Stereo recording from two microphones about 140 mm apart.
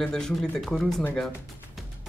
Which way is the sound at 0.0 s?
5° left (ahead or behind).